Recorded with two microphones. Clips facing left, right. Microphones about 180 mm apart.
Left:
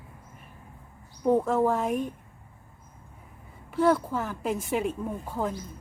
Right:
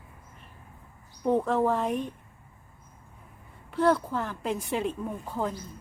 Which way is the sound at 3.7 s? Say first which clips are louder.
Left 1 dB; 5° left (ahead or behind).